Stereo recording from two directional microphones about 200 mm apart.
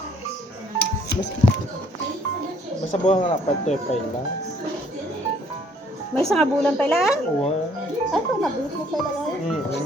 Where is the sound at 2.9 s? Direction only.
35° left (ahead or behind).